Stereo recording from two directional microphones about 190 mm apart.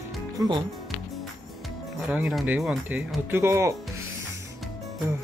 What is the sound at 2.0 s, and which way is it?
Speech, 5° right (ahead or behind).